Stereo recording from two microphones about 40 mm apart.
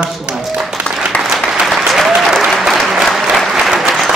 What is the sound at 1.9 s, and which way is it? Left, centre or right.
Applause, centre.